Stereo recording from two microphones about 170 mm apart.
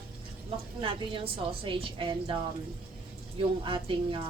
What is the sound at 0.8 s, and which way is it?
A woman's voice, 30° right (ahead or behind).